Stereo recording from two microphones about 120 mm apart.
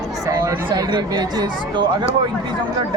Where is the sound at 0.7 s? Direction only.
40° right (ahead or behind).